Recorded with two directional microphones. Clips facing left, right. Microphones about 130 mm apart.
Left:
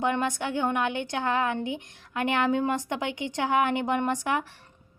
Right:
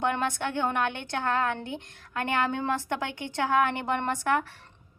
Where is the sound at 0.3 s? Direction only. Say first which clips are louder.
Left 1 dB; 15° left (ahead or behind).